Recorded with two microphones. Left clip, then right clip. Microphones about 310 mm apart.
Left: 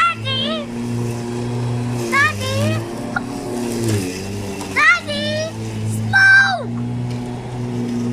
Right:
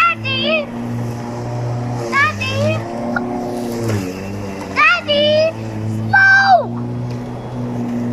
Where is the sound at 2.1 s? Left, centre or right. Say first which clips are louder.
Right 1 dB; centre.